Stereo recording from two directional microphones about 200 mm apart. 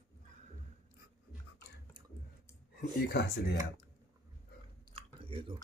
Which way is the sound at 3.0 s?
55° left (ahead or behind).